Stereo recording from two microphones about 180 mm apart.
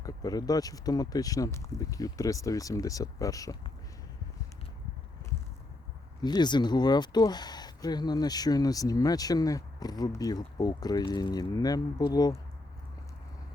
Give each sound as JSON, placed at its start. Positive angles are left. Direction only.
{"t": 0.0, "sound": "speech", "side_deg": 20}
{"t": 6.2, "sound": "speech", "side_deg": 25}